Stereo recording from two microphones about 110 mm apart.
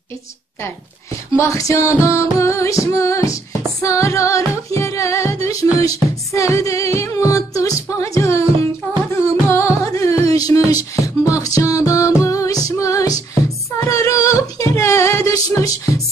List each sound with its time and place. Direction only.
1.3 s music: 25° left (ahead or behind)